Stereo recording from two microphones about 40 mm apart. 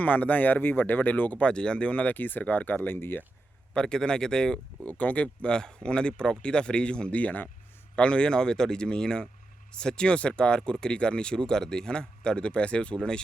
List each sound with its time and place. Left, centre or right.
0.0 s speech: left
1.5 s speech: left
2.1 s speech: left
3.8 s speech: centre
4.9 s speech: left
7.2 s speech: left
7.9 s speech: left